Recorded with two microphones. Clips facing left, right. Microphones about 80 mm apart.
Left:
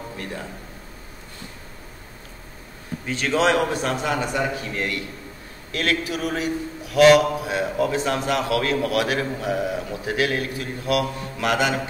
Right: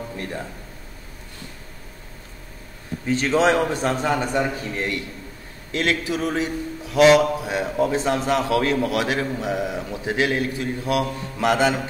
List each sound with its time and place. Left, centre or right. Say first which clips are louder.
3.3 s mantra: even; right